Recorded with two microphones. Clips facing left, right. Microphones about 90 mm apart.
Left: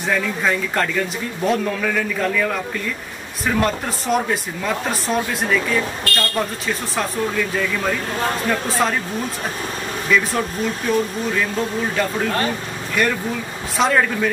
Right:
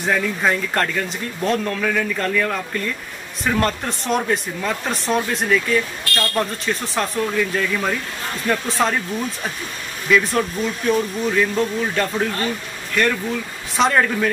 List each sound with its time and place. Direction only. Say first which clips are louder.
0.0 s speech: right 1 dB; 5° right (ahead or behind)
10.1 s speech: right 2 dB; centre (ahead or behind)